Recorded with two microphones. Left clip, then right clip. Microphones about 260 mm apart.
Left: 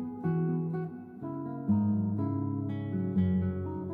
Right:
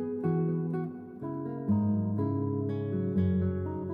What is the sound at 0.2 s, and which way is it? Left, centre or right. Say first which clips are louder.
Music: right 2 dB; right.